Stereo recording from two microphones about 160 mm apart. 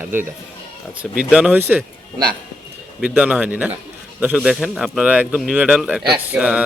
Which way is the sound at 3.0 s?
10° right (ahead or behind).